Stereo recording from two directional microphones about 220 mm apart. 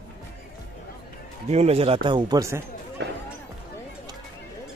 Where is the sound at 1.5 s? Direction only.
30° right (ahead or behind).